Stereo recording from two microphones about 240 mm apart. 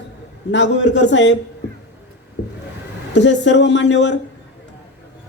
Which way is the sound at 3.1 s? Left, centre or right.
Left.